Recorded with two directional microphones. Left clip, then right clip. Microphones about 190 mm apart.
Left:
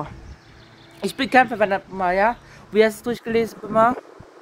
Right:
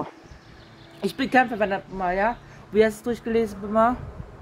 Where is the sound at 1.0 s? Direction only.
20° left (ahead or behind).